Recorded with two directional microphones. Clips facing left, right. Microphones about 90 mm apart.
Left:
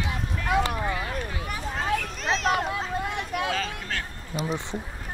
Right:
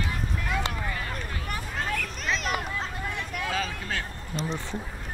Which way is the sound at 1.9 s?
35° left (ahead or behind).